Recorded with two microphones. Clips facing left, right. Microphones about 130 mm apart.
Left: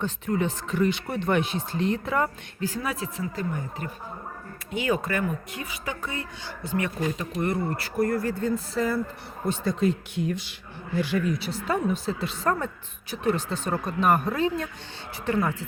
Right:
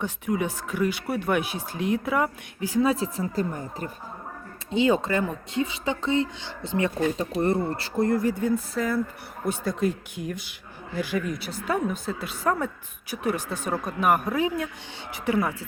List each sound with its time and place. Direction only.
0.0 s speech: 10° right (ahead or behind)
2.8 s speech: 30° right (ahead or behind)
4.7 s speech: 25° right (ahead or behind)
8.7 s speech: centre (ahead or behind)